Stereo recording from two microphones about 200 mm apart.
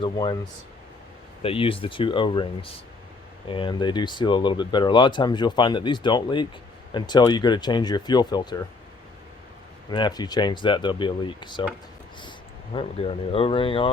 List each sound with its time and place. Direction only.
0.0 s speech: 25° left (ahead or behind)
1.4 s speech: 30° left (ahead or behind)
9.9 s speech: 20° left (ahead or behind)
12.7 s speech: 30° left (ahead or behind)